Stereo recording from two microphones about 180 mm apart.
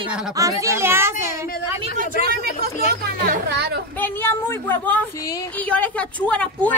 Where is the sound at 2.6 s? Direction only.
60° right (ahead or behind).